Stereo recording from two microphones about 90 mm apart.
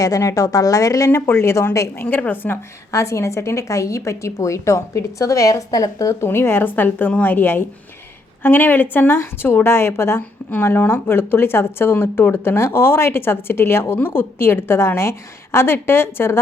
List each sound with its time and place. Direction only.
0.0 s a woman's voice: 35° left (ahead or behind); by 2.6 s 20° left (ahead or behind)
2.9 s a woman's voice: 35° left (ahead or behind)
6.2 s a woman's voice: 25° left (ahead or behind)